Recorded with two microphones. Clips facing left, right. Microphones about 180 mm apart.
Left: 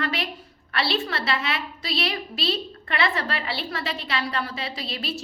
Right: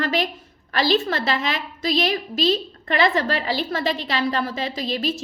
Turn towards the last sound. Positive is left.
turn(degrees=-40)  # may be behind; listen again after turning